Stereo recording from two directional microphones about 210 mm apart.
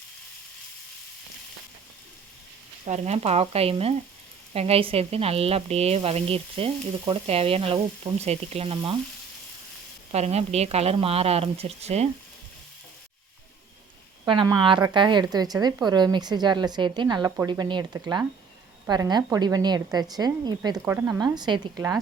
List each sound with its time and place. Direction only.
2.8 s a woman's voice: 30° right (ahead or behind)
10.1 s a woman's voice: 30° right (ahead or behind)
14.3 s a woman's voice: 20° right (ahead or behind)